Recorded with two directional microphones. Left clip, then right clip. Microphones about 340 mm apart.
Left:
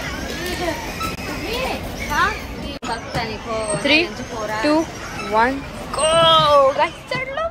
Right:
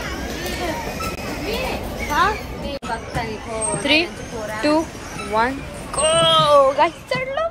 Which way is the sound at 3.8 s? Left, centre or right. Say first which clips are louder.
Left 1 dB; centre.